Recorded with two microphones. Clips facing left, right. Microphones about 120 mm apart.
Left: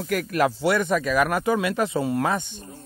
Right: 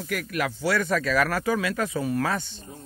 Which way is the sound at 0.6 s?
20° left (ahead or behind).